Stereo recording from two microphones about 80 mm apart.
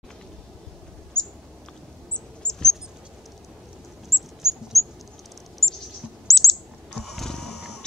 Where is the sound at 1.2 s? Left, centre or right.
Centre.